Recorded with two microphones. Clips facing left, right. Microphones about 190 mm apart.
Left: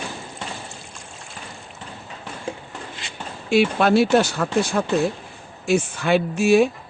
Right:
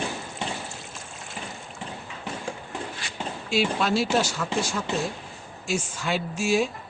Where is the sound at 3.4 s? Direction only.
60° left (ahead or behind).